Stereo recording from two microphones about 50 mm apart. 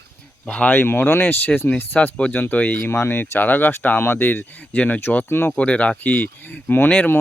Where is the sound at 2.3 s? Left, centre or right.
Left.